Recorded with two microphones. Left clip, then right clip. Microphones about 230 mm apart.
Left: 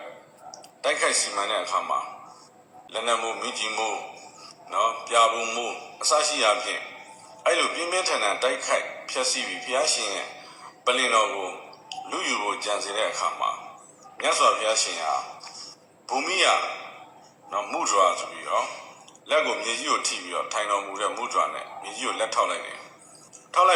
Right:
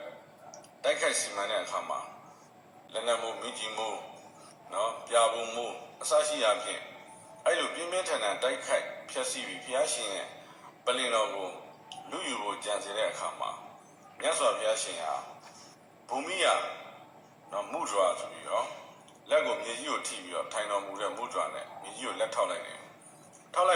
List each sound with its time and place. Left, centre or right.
0.8 s a man's voice: left